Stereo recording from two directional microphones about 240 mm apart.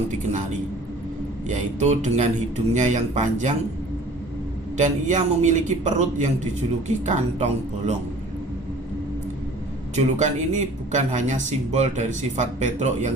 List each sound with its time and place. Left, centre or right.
1.5 s speech: right
4.8 s speech: right
9.9 s speech: right